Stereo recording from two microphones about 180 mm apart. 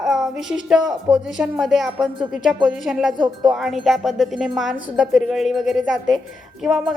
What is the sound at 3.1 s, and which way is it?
Speech, 25° right (ahead or behind).